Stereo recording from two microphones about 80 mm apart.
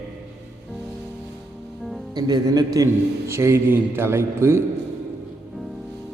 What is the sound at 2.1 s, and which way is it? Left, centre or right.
Speech, right.